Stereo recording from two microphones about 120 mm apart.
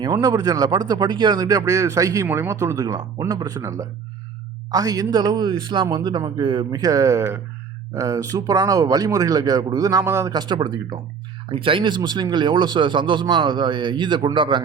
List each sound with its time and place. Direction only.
0.1 s speech: 30° right (ahead or behind)
10.3 s speech: 40° right (ahead or behind)
11.4 s speech: 50° right (ahead or behind)